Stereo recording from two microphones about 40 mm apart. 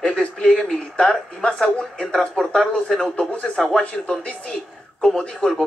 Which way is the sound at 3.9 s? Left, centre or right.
Left.